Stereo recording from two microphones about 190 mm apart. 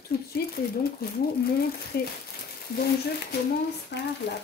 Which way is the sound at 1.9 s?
55° left (ahead or behind).